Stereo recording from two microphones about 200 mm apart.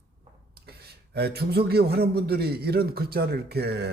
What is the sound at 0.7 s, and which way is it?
A man's voice, 55° right (ahead or behind).